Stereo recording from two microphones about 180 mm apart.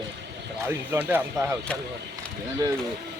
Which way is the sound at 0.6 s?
10° right (ahead or behind).